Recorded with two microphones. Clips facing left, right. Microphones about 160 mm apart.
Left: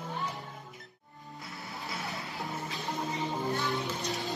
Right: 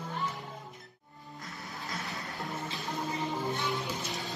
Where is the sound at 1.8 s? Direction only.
Centre (ahead or behind).